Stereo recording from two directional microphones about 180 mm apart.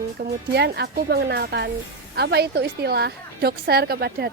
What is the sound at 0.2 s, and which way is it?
A woman's voice, 60° right (ahead or behind).